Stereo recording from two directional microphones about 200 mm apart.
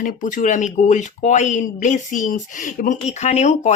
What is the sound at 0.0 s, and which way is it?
Speech, 40° left (ahead or behind).